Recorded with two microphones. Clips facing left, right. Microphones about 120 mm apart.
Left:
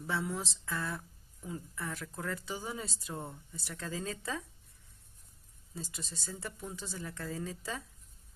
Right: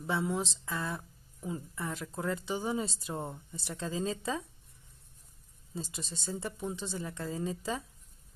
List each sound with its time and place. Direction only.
0.0 s speech: 20° right (ahead or behind)
5.8 s speech: 25° right (ahead or behind)